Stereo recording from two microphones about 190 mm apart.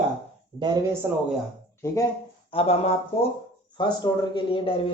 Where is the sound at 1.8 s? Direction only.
15° left (ahead or behind).